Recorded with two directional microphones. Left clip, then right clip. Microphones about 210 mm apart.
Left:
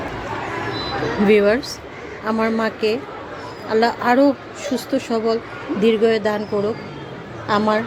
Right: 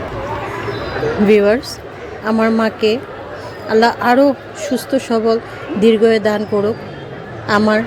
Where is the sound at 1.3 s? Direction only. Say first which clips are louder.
Right 3 dB; centre (ahead or behind).